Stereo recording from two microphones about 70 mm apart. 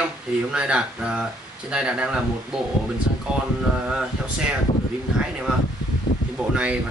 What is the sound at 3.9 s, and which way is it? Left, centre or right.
Speech, centre.